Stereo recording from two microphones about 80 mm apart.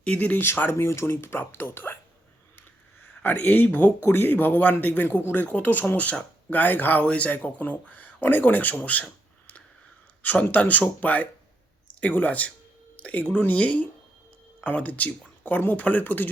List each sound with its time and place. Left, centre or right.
0.0 s speech: centre
3.2 s speech: left
10.2 s speech: centre